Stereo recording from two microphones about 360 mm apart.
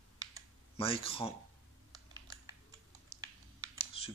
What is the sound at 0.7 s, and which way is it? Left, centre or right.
Speech, centre.